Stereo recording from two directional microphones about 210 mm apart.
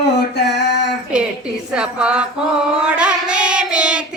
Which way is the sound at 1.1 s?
5° right (ahead or behind).